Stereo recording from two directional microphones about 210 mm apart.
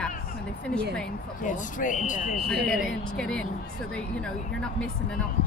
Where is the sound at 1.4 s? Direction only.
35° left (ahead or behind).